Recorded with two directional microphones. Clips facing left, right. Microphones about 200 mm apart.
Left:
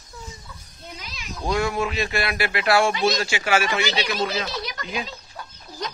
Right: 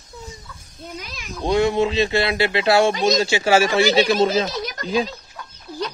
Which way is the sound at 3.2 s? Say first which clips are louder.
Right 6 dB; 30° right (ahead or behind).